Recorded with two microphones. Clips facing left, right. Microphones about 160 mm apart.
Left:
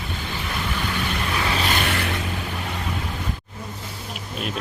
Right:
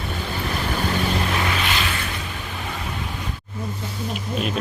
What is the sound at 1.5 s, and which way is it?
Vehicle, 35° left (ahead or behind).